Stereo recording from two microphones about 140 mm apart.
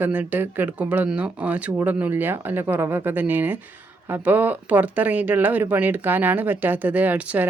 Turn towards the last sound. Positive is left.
turn(degrees=-10)  # may be behind; listen again after turning